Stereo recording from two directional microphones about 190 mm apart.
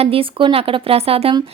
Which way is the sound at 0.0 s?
30° right (ahead or behind).